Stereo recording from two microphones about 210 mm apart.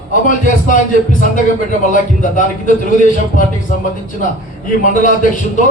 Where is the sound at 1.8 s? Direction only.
40° left (ahead or behind).